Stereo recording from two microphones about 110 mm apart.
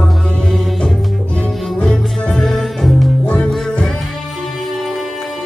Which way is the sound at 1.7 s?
10° left (ahead or behind).